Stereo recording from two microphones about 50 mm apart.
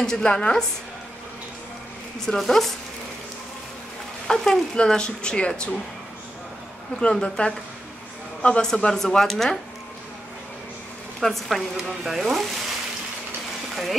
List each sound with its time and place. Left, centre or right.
0.0 s speech: centre
2.1 s speech: centre
4.3 s speech: centre
4.7 s a woman's voice: centre
7.0 s a woman's voice: centre
11.1 s speech: centre